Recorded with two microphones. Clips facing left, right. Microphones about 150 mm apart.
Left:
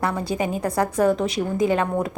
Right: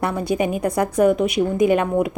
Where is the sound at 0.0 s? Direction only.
20° right (ahead or behind).